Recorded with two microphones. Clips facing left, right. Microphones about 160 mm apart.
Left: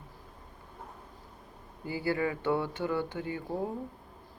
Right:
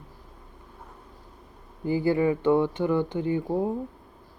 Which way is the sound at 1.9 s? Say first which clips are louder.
Right 8 dB; 20° right (ahead or behind).